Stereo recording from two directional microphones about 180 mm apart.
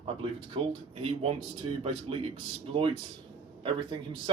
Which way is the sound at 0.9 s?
35° right (ahead or behind).